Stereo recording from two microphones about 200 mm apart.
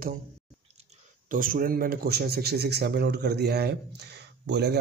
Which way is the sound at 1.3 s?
45° right (ahead or behind).